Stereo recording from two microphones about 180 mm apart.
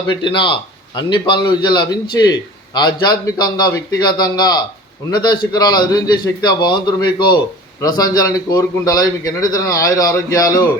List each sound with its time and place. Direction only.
0.2 s a man's voice: 25° left (ahead or behind)